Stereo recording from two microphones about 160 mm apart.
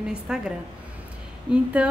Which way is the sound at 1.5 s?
5° right (ahead or behind).